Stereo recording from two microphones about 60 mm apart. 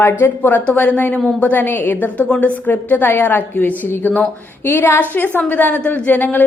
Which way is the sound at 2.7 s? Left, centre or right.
Left.